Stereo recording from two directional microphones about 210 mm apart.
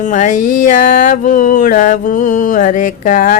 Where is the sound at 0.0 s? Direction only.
35° left (ahead or behind).